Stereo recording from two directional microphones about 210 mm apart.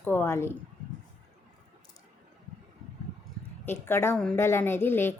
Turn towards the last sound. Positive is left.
turn(degrees=10)  # may be behind; listen again after turning